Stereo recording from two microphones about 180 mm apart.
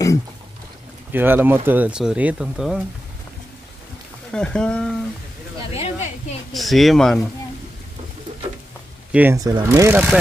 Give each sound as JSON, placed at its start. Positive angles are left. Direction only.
{"t": 1.1, "sound": "speech", "side_deg": -10}
{"t": 4.3, "sound": "speech", "side_deg": 5}
{"t": 5.7, "sound": "a sound", "side_deg": 35}
{"t": 6.5, "sound": "speech", "side_deg": 0}
{"t": 9.1, "sound": "speech", "side_deg": -10}